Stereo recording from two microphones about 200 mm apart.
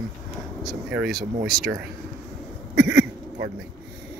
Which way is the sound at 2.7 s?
60° right (ahead or behind).